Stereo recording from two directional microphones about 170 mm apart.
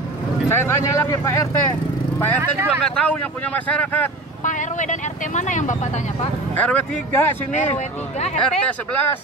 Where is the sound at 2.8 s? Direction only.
5° left (ahead or behind).